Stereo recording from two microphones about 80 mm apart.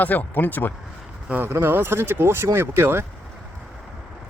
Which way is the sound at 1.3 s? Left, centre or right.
Right.